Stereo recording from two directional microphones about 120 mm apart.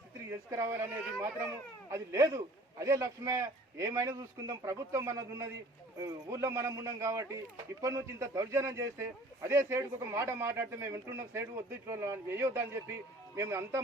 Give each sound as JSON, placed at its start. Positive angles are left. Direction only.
{"t": 0.3, "sound": "a man's voice", "side_deg": -25}
{"t": 1.9, "sound": "a man's voice", "side_deg": -25}